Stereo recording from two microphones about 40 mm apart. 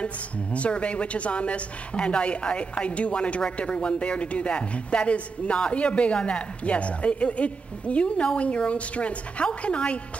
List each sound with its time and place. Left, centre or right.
0.0 s a woman's voice: left